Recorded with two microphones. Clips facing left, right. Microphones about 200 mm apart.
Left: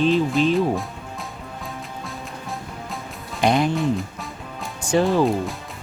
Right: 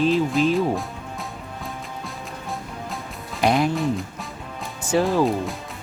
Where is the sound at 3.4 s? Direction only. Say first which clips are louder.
Left 1 dB; centre (ahead or behind).